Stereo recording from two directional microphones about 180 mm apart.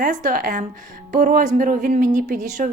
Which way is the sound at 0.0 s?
45° right (ahead or behind).